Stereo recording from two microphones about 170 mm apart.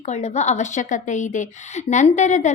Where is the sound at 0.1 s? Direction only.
40° left (ahead or behind).